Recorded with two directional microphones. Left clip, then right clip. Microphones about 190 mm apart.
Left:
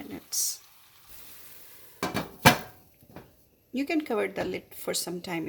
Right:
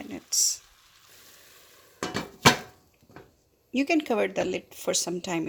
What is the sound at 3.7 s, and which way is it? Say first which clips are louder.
Speech: right 4 dB; 30° right (ahead or behind).